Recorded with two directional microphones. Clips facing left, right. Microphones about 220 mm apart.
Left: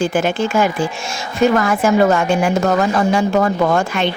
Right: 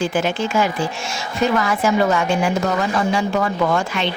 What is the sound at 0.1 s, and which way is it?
Speech, 50° left (ahead or behind).